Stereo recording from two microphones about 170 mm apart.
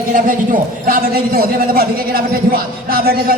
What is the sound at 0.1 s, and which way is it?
A man's voice, 55° right (ahead or behind).